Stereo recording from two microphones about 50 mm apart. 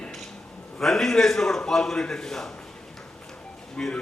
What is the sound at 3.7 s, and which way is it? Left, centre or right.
Speech, centre.